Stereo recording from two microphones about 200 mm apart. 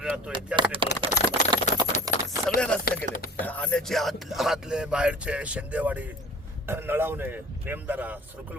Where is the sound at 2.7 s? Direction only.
5° left (ahead or behind).